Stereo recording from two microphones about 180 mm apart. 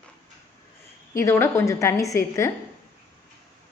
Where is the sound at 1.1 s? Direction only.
15° left (ahead or behind).